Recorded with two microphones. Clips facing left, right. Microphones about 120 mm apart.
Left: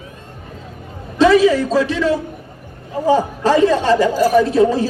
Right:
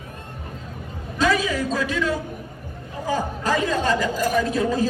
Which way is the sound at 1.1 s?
30° left (ahead or behind).